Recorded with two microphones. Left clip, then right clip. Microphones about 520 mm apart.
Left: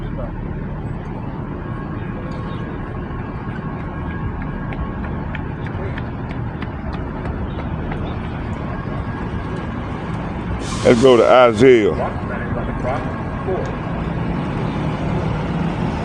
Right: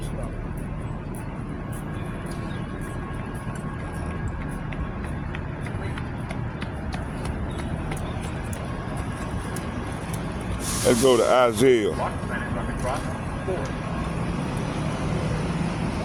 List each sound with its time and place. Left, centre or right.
10.8 s speech: right